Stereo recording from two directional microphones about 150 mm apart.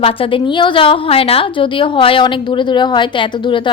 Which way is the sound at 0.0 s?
35° left (ahead or behind).